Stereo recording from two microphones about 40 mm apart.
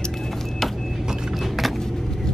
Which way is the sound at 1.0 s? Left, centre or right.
Centre.